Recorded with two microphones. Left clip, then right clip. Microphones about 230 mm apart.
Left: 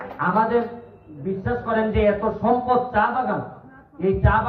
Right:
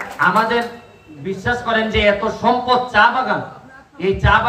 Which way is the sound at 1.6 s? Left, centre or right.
Right.